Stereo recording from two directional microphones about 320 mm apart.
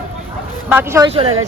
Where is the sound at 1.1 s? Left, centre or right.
Centre.